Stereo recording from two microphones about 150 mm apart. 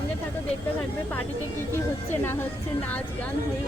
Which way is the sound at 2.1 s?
15° left (ahead or behind).